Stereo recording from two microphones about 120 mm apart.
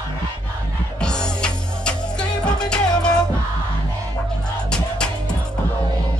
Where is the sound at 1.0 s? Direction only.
5° left (ahead or behind).